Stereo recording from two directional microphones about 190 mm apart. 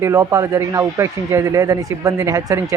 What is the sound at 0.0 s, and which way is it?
Speech, 15° right (ahead or behind).